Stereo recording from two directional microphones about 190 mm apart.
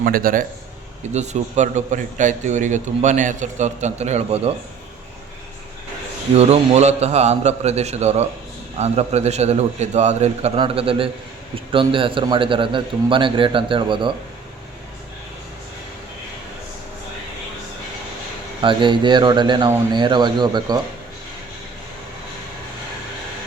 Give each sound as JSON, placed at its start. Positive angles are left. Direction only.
{"t": 0.0, "sound": "a man's voice", "side_deg": -50}
{"t": 1.1, "sound": "a man's voice", "side_deg": -35}
{"t": 6.3, "sound": "a man's voice", "side_deg": -35}
{"t": 18.6, "sound": "a man's voice", "side_deg": -25}